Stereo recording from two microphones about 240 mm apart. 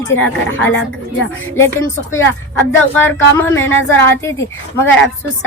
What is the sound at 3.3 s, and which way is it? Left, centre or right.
A woman's voice, centre.